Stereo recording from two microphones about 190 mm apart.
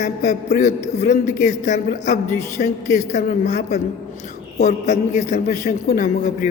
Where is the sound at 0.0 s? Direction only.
40° left (ahead or behind).